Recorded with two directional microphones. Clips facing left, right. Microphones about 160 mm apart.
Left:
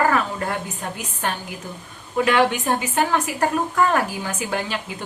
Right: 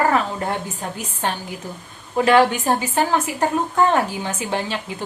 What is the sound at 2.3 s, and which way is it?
A woman's voice, 35° right (ahead or behind).